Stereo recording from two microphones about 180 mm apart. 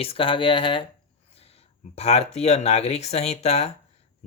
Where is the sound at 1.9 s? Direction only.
35° left (ahead or behind).